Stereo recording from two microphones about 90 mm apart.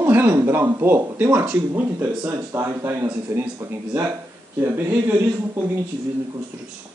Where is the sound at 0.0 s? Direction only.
20° right (ahead or behind).